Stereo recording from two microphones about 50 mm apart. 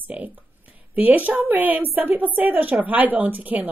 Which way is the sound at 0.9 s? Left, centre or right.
Right.